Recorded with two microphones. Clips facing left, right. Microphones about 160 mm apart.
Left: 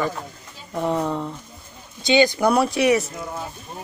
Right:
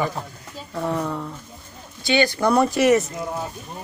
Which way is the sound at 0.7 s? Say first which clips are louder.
Left 2 dB; 15° left (ahead or behind).